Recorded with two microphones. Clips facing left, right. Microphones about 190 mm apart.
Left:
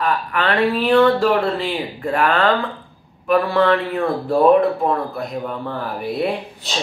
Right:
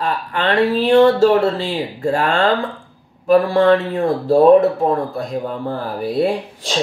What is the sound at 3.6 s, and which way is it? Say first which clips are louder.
Speech: right 3 dB; 25° right (ahead or behind).